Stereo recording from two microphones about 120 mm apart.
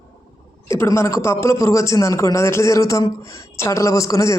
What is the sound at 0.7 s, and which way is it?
Speech, 25° left (ahead or behind).